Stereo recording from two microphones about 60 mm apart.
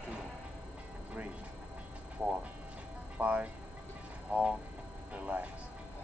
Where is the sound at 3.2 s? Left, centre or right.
Right.